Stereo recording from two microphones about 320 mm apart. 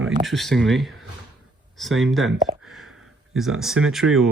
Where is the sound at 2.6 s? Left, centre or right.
Centre.